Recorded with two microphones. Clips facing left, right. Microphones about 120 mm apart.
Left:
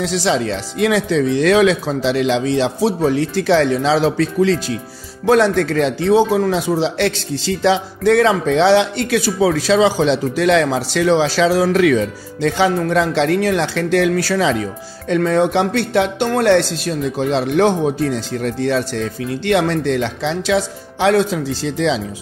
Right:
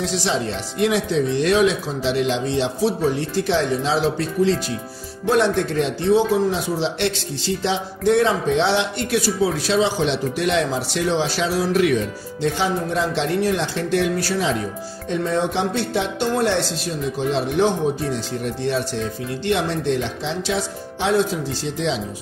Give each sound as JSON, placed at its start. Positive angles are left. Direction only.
{"t": 0.0, "sound": "speech", "side_deg": 90}